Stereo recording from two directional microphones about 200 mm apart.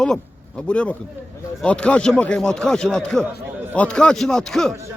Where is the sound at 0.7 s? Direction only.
5° left (ahead or behind).